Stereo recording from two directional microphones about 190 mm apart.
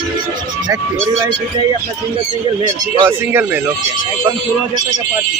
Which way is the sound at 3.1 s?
10° right (ahead or behind).